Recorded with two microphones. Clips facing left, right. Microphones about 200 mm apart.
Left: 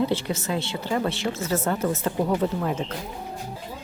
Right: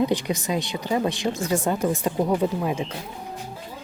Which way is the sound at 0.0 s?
15° right (ahead or behind).